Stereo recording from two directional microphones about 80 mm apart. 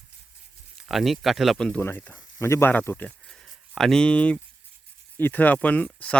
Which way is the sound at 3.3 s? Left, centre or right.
Centre.